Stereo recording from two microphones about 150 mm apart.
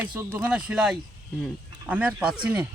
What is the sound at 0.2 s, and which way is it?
Speech, 15° right (ahead or behind).